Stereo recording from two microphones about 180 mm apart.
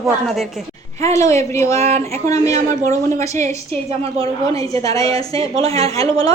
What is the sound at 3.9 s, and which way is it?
Speech, 35° right (ahead or behind).